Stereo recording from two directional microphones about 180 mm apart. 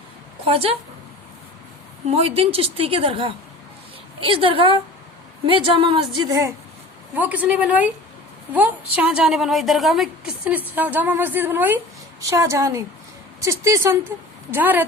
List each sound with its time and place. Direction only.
0.4 s a woman's voice: 35° right (ahead or behind)
2.1 s a woman's voice: 35° right (ahead or behind)
7.2 s a woman's voice: 10° right (ahead or behind)